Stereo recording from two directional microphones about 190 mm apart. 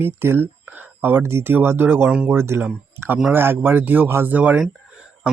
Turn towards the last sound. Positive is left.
turn(degrees=-5)  # may be behind; listen again after turning